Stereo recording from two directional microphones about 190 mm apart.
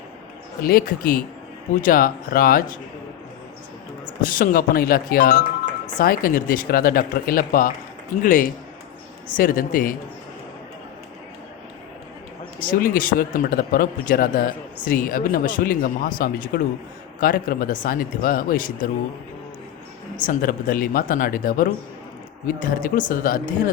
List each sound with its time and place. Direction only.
0.6 s speech: 50° left (ahead or behind)
4.3 s speech: 50° left (ahead or behind)
12.6 s speech: 50° left (ahead or behind)
20.2 s speech: 45° left (ahead or behind)